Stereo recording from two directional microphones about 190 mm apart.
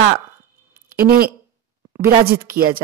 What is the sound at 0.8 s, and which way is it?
Speech, 55° right (ahead or behind).